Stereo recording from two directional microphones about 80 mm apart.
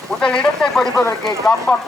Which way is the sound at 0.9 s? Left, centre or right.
Left.